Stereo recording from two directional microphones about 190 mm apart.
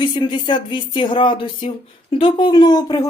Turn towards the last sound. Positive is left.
turn(degrees=20)  # may be behind; listen again after turning